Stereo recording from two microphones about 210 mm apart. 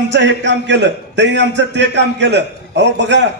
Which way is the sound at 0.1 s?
60° right (ahead or behind).